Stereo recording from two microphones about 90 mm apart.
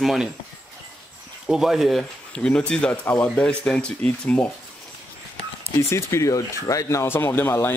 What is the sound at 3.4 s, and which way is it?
Speech, 10° left (ahead or behind).